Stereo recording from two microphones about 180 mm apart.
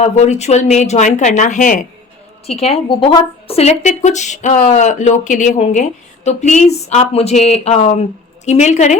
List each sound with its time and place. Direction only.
0.0 s a woman's voice: 40° left (ahead or behind)
2.5 s a woman's voice: 35° left (ahead or behind)